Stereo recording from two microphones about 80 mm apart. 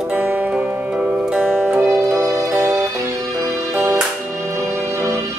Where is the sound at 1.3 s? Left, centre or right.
Centre.